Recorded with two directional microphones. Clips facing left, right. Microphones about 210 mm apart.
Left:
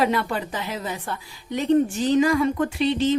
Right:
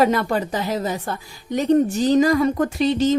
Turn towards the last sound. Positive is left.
turn(degrees=-40)  # may be behind; listen again after turning